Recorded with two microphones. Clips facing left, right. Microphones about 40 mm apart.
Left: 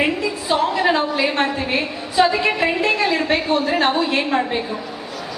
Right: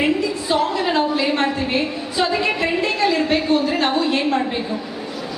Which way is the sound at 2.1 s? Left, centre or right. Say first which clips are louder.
Left 4 dB; centre.